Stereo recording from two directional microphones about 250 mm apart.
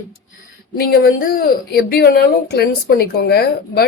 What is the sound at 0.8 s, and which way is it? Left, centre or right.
A woman's voice, left.